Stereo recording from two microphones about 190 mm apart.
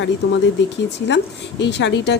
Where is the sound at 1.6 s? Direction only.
65° left (ahead or behind).